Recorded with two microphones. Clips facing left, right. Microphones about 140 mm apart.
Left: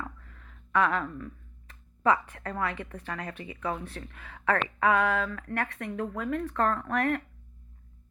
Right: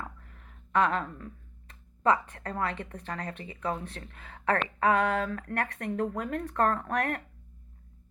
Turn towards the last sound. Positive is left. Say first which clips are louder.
# left 2 dB
turn(degrees=-40)  # may be behind; listen again after turning